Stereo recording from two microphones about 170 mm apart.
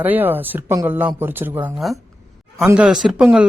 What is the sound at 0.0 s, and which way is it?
Speech, 10° right (ahead or behind).